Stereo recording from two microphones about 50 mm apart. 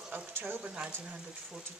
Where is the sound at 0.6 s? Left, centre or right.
Centre.